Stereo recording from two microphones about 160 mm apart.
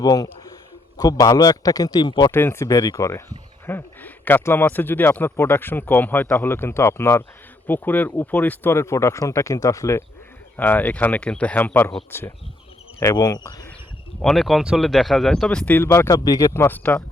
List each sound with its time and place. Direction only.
0.0 s a man's voice: 20° left (ahead or behind)
2.3 s speech: 15° left (ahead or behind)
13.0 s a man's voice: 20° left (ahead or behind)
14.2 s speech: centre (ahead or behind)